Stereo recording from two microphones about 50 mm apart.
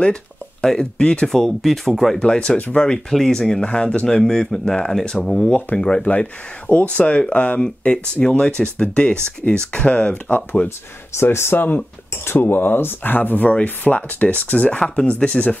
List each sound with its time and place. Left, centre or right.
0.0 s a sound: centre
0.7 s speech: centre
1.3 s speech: centre
2.1 s speech: centre
3.1 s speech: centre
5.2 s speech: centre
5.8 s speech: centre
6.7 s speech: left
11.1 s speech: left